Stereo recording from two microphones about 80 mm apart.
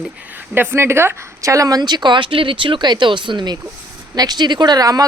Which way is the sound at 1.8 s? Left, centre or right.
Right.